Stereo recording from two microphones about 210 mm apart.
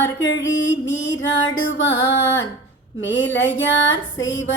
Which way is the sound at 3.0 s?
60° left (ahead or behind).